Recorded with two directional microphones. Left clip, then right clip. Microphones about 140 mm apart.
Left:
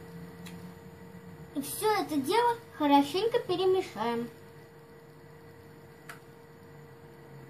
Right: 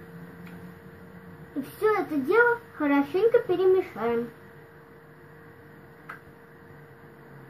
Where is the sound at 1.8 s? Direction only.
25° left (ahead or behind).